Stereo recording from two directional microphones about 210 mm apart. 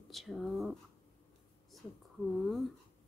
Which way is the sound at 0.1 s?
Centre (ahead or behind).